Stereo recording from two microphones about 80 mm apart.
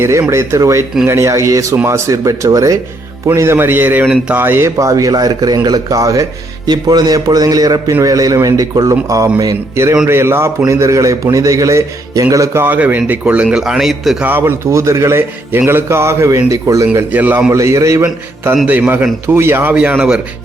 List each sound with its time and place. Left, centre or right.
0.0 s a man's voice: right
1.7 s a man's voice: right; by 4.4 s centre
4.4 s a man's voice: right
4.8 s a man's voice: right
6.7 s a man's voice: right
9.7 s a man's voice: right
12.6 s a man's voice: right; by 14.2 s centre
14.2 s a man's voice: right
17.1 s a man's voice: right
17.5 s a man's voice: right
18.6 s a man's voice: right
19.7 s a man's voice: centre